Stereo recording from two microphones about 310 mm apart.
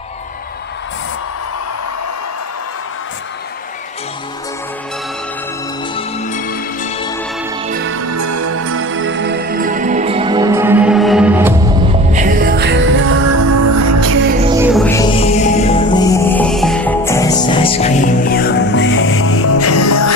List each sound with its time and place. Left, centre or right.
5.9 s music: left
7.6 s music: right
8.1 s music: right; by 11.5 s centre
12.1 s music: right
13.2 s music: right
14.6 s music: centre; by 20.1 s left